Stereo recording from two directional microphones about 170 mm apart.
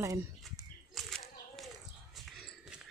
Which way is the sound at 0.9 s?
Centre (ahead or behind).